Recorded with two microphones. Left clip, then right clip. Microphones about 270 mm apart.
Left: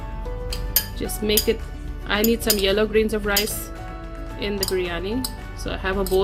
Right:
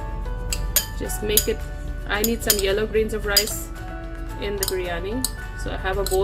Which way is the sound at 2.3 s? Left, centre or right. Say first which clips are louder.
Left 1 dB; left.